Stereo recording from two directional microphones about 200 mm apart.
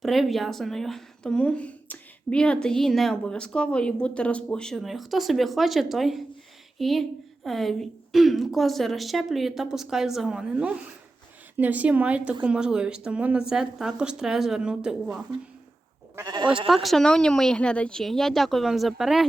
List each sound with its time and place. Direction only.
0.0 s speech: centre (ahead or behind)
16.1 s speech: 20° right (ahead or behind)
16.6 s speech: centre (ahead or behind)